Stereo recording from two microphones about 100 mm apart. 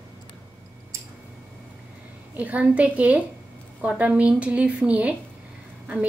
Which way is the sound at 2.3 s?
15° right (ahead or behind).